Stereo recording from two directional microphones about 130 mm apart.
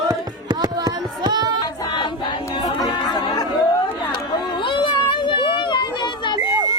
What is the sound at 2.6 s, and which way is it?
Chatter, 30° left (ahead or behind).